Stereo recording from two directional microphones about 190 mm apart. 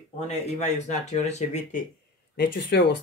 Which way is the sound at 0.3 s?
35° left (ahead or behind).